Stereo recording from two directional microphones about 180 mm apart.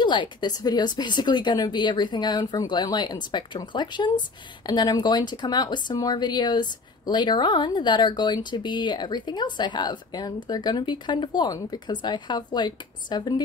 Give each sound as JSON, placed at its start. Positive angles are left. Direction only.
{"t": 0.0, "sound": "speech", "side_deg": 25}